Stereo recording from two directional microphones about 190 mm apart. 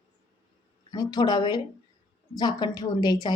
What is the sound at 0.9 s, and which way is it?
A woman's voice, 20° left (ahead or behind).